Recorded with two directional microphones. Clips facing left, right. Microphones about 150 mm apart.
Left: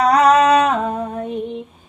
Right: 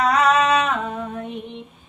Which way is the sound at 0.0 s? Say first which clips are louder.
Left 5 dB; 40° left (ahead or behind).